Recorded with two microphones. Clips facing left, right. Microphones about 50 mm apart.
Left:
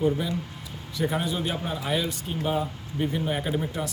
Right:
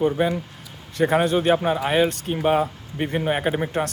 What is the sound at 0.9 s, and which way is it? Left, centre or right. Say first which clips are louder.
Speech: right 8 dB; right.